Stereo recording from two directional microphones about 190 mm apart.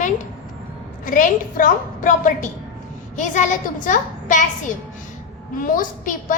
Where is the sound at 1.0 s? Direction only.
45° left (ahead or behind).